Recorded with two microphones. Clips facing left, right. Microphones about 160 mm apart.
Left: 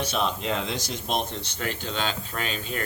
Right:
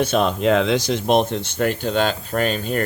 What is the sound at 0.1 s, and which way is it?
Speech, 55° right (ahead or behind).